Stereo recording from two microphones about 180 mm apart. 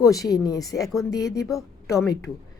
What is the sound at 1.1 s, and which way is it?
A woman's voice, 20° left (ahead or behind).